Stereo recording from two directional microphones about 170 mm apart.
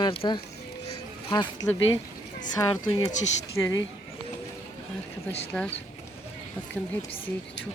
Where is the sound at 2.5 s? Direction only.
20° left (ahead or behind).